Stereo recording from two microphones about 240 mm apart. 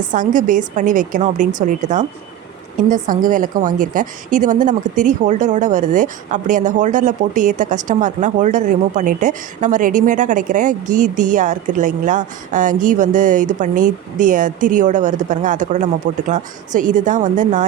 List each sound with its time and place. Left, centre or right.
0.1 s a woman's voice: right